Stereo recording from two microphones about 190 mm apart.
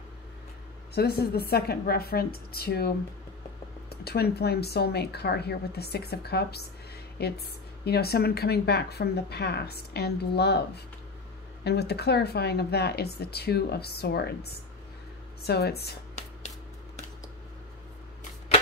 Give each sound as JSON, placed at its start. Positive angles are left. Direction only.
{"t": 0.9, "sound": "a woman's voice", "side_deg": 55}
{"t": 4.0, "sound": "a woman's voice", "side_deg": 55}
{"t": 15.4, "sound": "a woman's voice", "side_deg": 55}